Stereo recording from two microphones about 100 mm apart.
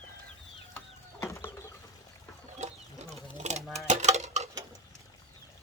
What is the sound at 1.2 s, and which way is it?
Chicken, 30° left (ahead or behind).